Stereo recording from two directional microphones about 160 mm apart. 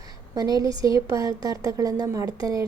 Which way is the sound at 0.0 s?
25° right (ahead or behind).